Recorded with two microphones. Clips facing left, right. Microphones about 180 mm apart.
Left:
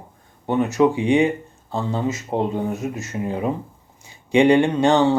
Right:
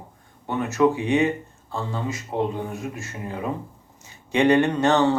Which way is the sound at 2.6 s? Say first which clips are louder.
Left 6 dB; 20° left (ahead or behind).